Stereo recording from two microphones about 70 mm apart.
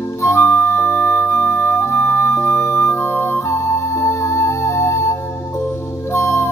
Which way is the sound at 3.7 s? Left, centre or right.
Left.